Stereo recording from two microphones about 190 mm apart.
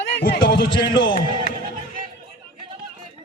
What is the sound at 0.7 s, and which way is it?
Music, 25° left (ahead or behind).